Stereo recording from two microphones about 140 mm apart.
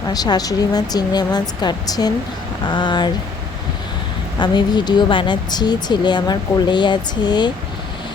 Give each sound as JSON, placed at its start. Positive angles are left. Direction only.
{"t": 0.1, "sound": "a woman's voice", "side_deg": 25}
{"t": 4.4, "sound": "speech", "side_deg": 30}